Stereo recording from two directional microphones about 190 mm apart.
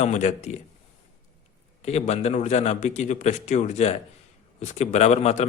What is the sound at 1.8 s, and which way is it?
A man's voice, 35° left (ahead or behind).